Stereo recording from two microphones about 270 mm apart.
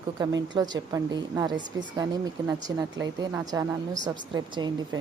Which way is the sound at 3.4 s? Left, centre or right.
Centre.